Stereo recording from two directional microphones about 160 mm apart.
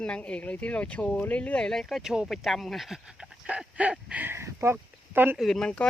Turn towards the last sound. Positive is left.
turn(degrees=5)  # may be behind; listen again after turning